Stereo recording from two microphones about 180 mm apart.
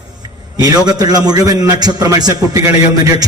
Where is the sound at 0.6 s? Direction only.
20° right (ahead or behind).